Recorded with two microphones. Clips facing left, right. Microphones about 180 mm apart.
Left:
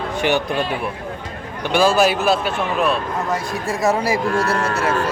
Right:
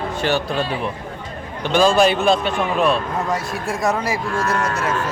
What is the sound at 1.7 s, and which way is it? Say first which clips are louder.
A man's voice: right 1 dB; 5° left (ahead or behind).